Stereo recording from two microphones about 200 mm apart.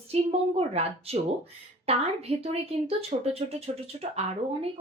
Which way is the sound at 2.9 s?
30° right (ahead or behind).